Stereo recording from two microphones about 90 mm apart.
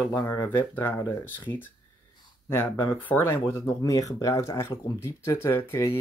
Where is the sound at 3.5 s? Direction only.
35° left (ahead or behind).